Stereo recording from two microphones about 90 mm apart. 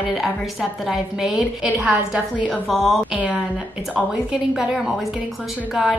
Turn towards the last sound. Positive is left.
turn(degrees=-5)  # may be behind; listen again after turning